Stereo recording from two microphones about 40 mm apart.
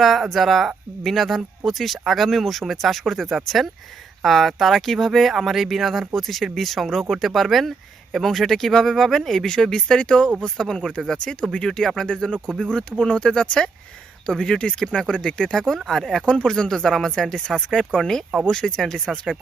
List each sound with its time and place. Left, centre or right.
0.0 s speech: centre; by 15.5 s left
15.5 s speech: centre